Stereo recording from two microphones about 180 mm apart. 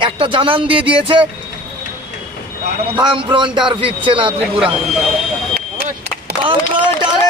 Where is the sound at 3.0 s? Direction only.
25° right (ahead or behind).